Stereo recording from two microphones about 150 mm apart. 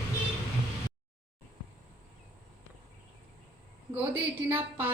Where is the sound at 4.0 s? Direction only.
15° right (ahead or behind).